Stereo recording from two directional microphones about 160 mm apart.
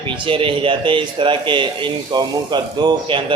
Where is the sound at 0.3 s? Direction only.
35° right (ahead or behind).